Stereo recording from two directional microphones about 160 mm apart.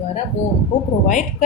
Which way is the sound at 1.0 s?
50° left (ahead or behind).